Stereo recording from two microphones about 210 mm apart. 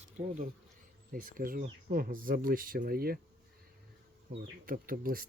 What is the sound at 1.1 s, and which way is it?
Speech, 40° right (ahead or behind).